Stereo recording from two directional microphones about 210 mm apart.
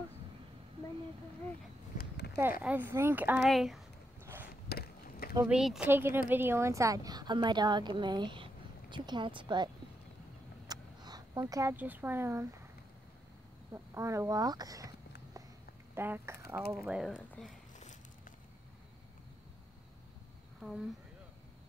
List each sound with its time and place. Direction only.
2.0 s a sound: 50° left (ahead or behind)
2.6 s speech: 10° right (ahead or behind)
4.5 s chop: 50° left (ahead or behind)
5.3 s speech: 5° right (ahead or behind); by 9.7 s 20° right (ahead or behind)
10.7 s speech: 20° right (ahead or behind)
13.9 s speech: 15° right (ahead or behind)
15.9 s speech: 10° right (ahead or behind)